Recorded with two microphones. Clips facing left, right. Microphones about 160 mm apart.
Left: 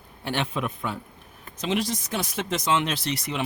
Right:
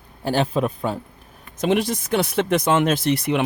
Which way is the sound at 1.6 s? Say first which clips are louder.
Right 6 dB; 55° right (ahead or behind).